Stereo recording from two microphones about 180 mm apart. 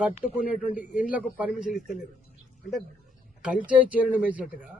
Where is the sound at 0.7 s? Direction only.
50° left (ahead or behind).